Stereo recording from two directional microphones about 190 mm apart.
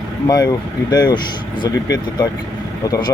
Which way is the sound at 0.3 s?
20° left (ahead or behind).